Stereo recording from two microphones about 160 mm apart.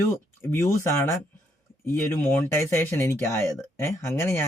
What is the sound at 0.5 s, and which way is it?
Speech, 15° left (ahead or behind).